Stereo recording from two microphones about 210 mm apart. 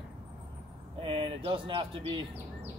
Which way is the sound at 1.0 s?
25° right (ahead or behind).